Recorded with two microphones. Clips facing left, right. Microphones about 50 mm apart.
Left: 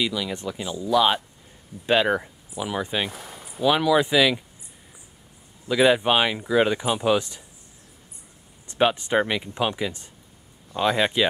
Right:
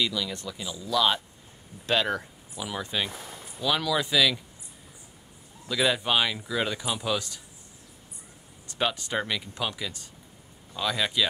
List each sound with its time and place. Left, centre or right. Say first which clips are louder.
0.0 s speech: left 3 dB; centre
3.1 s speech: left 2 dB; centre
5.7 s speech: left 7 dB; left
8.6 s speech: left 7 dB; left